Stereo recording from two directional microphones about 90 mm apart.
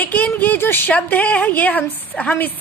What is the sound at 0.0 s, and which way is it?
Speech, 20° left (ahead or behind).